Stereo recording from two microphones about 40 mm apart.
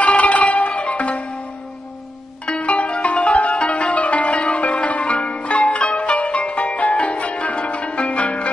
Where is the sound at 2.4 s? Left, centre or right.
Left.